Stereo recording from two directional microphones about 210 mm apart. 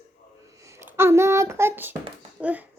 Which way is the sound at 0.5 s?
15° right (ahead or behind).